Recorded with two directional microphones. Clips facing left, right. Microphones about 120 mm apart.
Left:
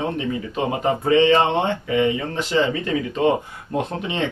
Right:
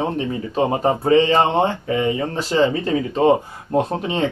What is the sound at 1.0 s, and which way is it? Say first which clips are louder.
Speech: even; 35° right (ahead or behind).